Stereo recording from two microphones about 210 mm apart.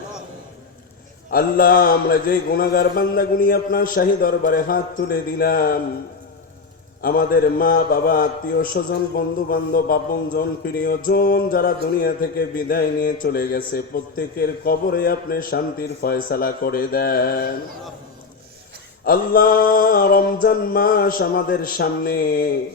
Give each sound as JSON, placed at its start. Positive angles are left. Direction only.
{"t": 1.3, "sound": "music", "side_deg": 45}
{"t": 7.0, "sound": "music", "side_deg": 45}
{"t": 19.0, "sound": "music", "side_deg": 45}